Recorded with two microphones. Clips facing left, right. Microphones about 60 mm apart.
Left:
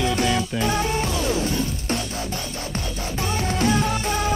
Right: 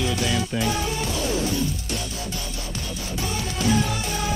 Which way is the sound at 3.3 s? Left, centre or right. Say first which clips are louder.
Left 2 dB; left.